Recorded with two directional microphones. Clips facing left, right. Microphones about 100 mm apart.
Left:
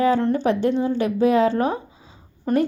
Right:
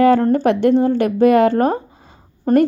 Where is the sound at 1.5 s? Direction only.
50° right (ahead or behind).